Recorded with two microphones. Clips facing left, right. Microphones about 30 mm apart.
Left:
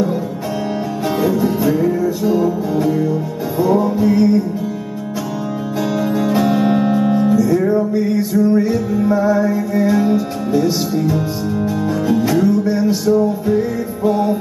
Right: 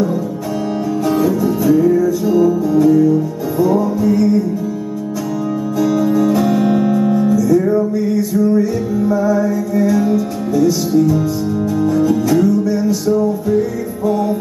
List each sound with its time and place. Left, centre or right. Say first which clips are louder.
1.2 s music: left 2 dB; left
5.8 s music: right 4 dB; left